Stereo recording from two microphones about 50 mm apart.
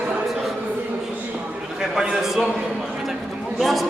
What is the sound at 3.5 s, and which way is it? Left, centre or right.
Speech, centre.